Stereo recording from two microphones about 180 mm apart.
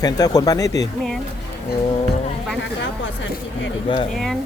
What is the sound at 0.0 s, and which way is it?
Speech, 20° left (ahead or behind).